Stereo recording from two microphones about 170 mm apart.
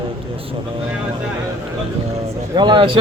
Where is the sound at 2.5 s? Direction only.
25° right (ahead or behind).